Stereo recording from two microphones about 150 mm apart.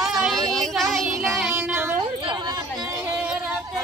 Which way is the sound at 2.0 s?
30° right (ahead or behind).